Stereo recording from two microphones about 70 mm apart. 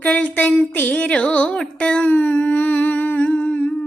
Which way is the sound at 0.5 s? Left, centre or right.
Left.